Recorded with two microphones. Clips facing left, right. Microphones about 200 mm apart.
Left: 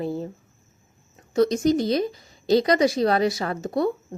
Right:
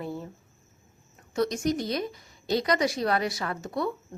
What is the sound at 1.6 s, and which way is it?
Speech, 90° left.